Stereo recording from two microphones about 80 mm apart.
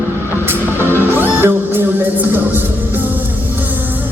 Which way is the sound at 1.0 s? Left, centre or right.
Right.